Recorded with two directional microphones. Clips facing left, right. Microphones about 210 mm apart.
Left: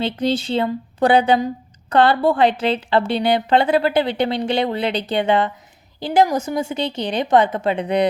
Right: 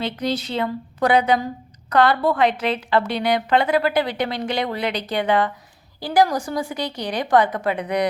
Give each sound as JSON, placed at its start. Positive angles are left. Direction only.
{"t": 0.0, "sound": "a woman's voice", "side_deg": 30}